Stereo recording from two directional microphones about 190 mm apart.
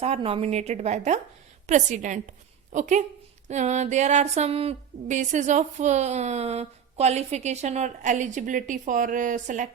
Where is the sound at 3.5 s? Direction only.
35° right (ahead or behind).